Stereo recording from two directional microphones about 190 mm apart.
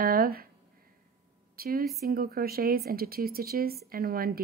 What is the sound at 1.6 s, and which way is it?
Speech, 50° right (ahead or behind).